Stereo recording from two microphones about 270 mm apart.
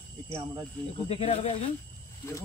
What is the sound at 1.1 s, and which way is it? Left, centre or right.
Speech, left.